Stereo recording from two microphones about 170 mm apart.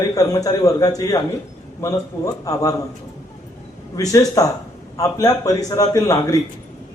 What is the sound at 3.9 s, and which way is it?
A man's voice, 20° left (ahead or behind).